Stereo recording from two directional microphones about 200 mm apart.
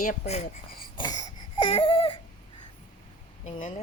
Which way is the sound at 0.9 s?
20° left (ahead or behind).